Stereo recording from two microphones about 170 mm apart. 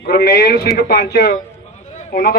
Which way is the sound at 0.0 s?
75° left (ahead or behind).